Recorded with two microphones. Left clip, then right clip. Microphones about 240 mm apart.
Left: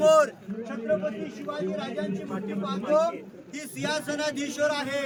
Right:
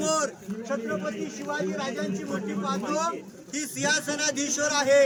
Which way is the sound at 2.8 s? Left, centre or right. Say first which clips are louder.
Left 9 dB; centre.